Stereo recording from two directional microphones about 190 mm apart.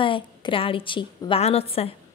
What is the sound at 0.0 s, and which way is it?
A woman's voice, 25° left (ahead or behind).